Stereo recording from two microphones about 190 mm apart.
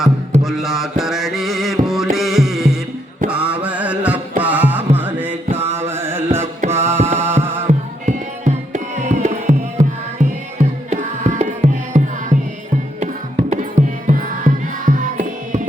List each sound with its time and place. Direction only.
0.4 s music: centre (ahead or behind)
7.7 s music: 40° right (ahead or behind)
10.8 s music: 40° right (ahead or behind)
13.5 s music: 40° right (ahead or behind)